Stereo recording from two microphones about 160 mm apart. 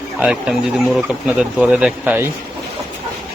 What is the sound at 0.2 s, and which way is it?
Speech, 5° right (ahead or behind).